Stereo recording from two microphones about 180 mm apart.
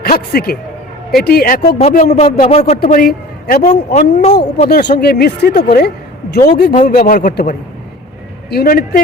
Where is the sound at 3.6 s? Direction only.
40° left (ahead or behind).